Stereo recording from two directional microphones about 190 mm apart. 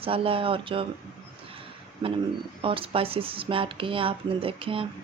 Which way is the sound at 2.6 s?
30° right (ahead or behind).